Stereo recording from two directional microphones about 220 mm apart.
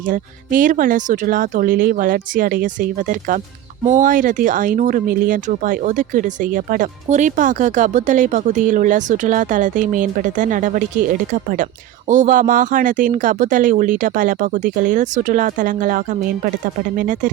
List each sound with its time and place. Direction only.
0.1 s speech: 40° right (ahead or behind)